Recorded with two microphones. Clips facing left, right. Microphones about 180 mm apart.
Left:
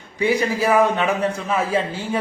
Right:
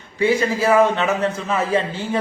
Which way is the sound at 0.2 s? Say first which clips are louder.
Right 1 dB; 15° left (ahead or behind).